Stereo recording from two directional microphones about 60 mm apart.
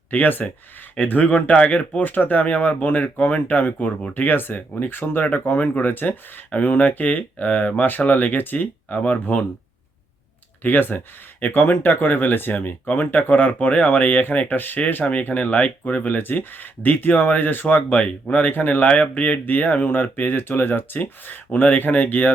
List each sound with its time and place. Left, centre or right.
0.1 s speech: left
4.9 s speech: left
10.6 s speech: left